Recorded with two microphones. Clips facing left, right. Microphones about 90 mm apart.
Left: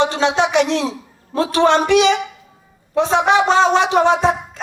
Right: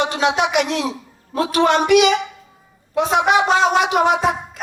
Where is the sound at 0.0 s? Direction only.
30° left (ahead or behind).